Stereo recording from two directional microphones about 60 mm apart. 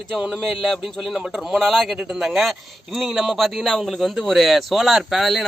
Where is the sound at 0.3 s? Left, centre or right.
Centre.